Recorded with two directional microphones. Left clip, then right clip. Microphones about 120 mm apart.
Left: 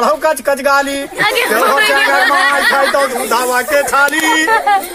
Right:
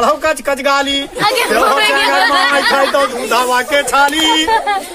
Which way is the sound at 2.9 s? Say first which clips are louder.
Even; 15° right (ahead or behind).